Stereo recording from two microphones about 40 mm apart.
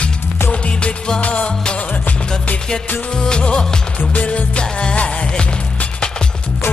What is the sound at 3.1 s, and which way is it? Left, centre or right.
Music, left.